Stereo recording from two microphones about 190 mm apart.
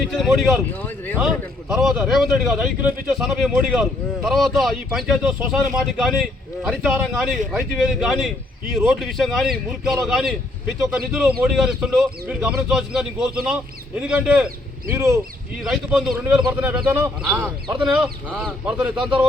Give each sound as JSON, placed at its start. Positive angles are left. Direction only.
{"t": 0.1, "sound": "speech", "side_deg": 0}
{"t": 1.7, "sound": "speech", "side_deg": 0}
{"t": 15.7, "sound": "speech", "side_deg": 0}